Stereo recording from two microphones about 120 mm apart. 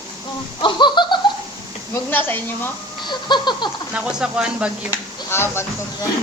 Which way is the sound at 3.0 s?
40° left (ahead or behind).